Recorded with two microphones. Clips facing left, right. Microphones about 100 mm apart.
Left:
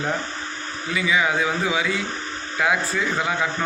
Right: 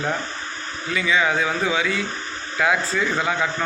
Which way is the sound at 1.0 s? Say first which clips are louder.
Right 1 dB; 15° left (ahead or behind).